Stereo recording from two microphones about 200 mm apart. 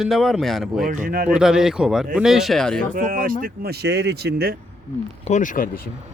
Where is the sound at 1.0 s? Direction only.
45° right (ahead or behind).